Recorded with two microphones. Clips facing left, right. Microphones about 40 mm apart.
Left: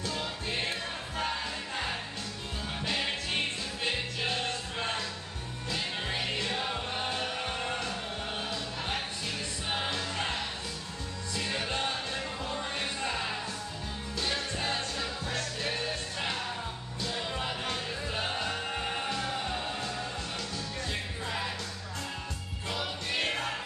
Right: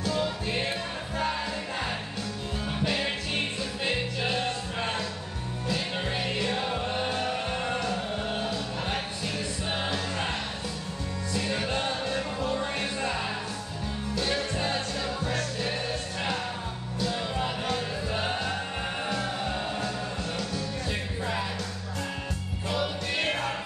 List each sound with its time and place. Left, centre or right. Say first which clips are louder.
0.0 s music: right 6 dB; centre
11.3 s music: right 3 dB; centre
17.0 s music: right 4 dB; centre
22.7 s music: right 4 dB; centre